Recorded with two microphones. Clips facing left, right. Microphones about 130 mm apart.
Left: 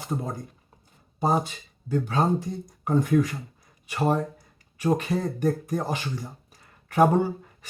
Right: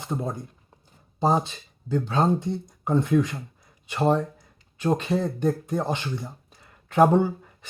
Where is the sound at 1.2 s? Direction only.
25° right (ahead or behind).